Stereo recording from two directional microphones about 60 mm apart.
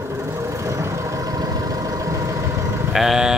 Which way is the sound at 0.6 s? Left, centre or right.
Right.